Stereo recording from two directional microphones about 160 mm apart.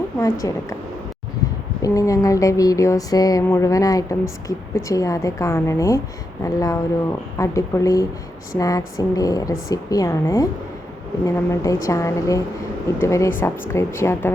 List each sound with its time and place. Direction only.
0.2 s speech: 20° left (ahead or behind)
1.8 s speech: 20° left (ahead or behind)